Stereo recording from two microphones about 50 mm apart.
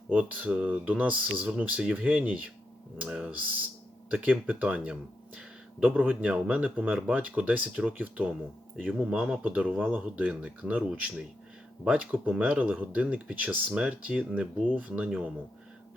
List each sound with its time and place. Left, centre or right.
0.1 s speech: right
12.6 s speech: right